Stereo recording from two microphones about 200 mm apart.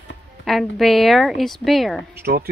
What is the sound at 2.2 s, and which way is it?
Speech, 50° right (ahead or behind).